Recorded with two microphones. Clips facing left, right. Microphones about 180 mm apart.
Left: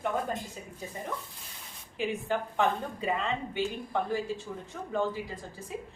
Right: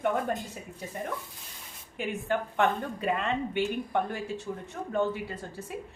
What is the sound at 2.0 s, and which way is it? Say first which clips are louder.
A woman's voice: even; 60° right (ahead or behind).